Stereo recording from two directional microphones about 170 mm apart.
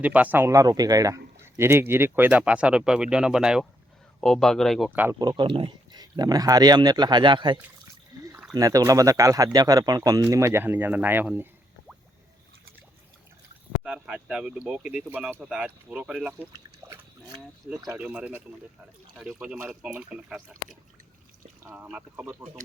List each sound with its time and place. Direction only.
0.0 s a man's voice: 10° right (ahead or behind)
4.9 s a man's voice: 10° right (ahead or behind)
5.3 s speech: 30° right (ahead or behind); by 11.4 s 10° right (ahead or behind)
13.8 s speech: 5° right (ahead or behind)
16.5 s pig: 10° right (ahead or behind)
17.9 s a man's voice: 10° right (ahead or behind)